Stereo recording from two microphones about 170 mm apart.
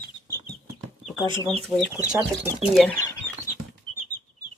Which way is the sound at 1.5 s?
Centre (ahead or behind).